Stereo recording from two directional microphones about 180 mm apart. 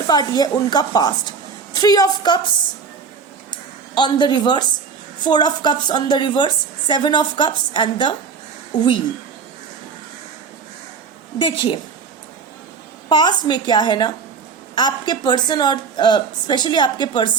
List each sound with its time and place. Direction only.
0.1 s a woman's voice: 20° left (ahead or behind)
3.5 s a sound: 25° left (ahead or behind)
5.2 s a woman's voice: 25° left (ahead or behind)
11.3 s a woman's voice: 25° left (ahead or behind)
13.1 s a woman's voice: 25° left (ahead or behind)